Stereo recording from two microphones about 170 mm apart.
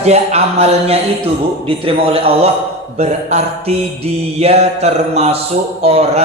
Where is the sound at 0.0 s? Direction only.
40° right (ahead or behind).